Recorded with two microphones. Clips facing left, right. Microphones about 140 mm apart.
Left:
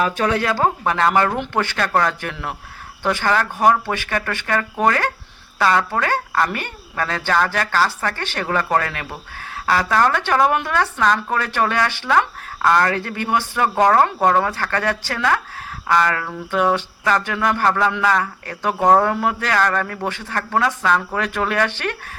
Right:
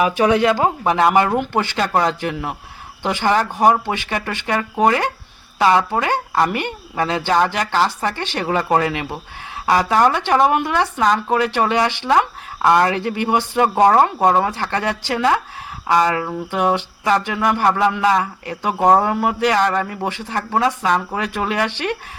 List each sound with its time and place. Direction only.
0.0 s speech: 15° right (ahead or behind)